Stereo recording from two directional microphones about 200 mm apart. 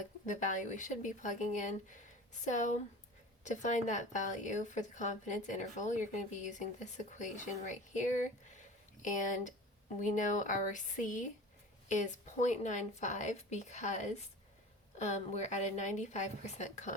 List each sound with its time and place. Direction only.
0.3 s a woman's voice: 40° left (ahead or behind)